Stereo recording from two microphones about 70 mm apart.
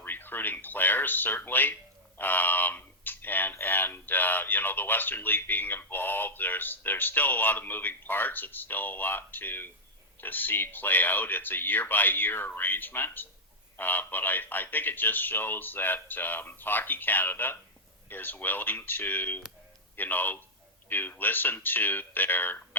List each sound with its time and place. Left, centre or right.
0.0 s speech: left